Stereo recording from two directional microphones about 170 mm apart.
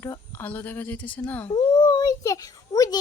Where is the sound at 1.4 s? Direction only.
25° left (ahead or behind).